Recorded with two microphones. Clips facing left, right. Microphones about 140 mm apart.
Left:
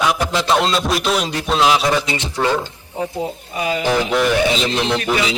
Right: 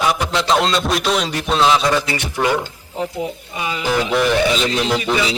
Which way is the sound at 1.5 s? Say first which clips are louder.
Even; 5° left (ahead or behind).